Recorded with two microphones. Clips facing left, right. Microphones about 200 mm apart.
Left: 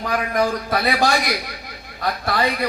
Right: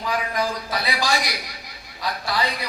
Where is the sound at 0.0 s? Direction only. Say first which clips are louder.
Left 4 dB; 55° left (ahead or behind).